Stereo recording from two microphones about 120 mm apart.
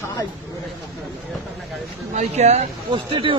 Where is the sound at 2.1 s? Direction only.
70° right (ahead or behind).